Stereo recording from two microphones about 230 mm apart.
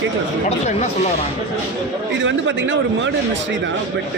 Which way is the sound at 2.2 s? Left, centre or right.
Right.